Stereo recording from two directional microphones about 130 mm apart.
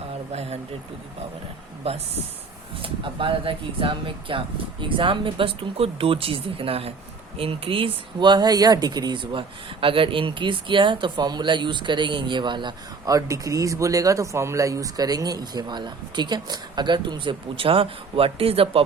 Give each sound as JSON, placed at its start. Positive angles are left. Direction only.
{"t": 1.8, "sound": "speech", "side_deg": -50}